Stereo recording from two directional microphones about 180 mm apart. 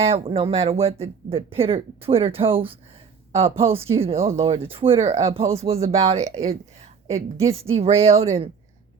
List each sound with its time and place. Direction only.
0.0 s speech: 30° right (ahead or behind)